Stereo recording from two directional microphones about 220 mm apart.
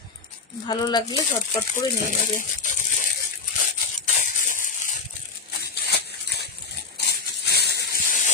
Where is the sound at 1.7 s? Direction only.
35° left (ahead or behind).